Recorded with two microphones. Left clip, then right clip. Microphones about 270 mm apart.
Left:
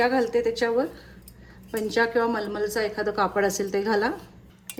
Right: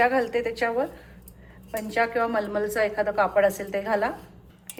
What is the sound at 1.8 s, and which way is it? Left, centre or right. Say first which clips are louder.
Speech: left 1 dB; centre.